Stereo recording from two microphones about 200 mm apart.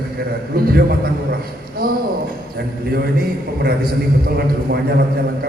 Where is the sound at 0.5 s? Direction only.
50° right (ahead or behind).